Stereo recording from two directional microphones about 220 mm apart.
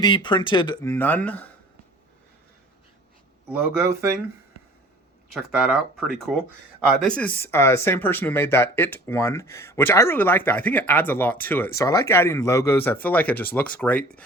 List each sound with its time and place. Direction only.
0.0 s speech: 20° left (ahead or behind)
5.3 s speech: 5° right (ahead or behind)